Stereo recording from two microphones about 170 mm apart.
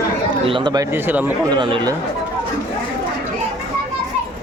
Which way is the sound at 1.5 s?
25° right (ahead or behind).